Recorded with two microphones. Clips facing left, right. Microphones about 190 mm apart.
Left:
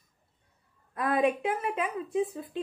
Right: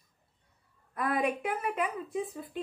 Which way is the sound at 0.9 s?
20° left (ahead or behind).